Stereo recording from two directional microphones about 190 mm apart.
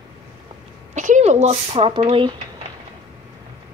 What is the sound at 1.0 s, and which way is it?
A child's voice, 40° right (ahead or behind).